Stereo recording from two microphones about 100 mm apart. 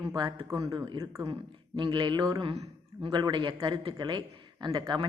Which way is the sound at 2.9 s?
35° right (ahead or behind).